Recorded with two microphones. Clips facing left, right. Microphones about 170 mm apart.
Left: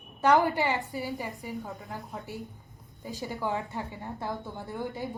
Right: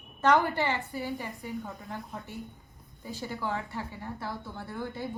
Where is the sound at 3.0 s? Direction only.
15° left (ahead or behind).